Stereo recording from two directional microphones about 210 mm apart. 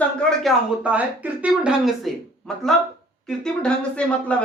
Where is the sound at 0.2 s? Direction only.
Centre (ahead or behind).